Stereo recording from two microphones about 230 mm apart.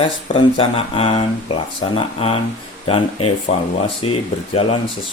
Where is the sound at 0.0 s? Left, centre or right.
Left.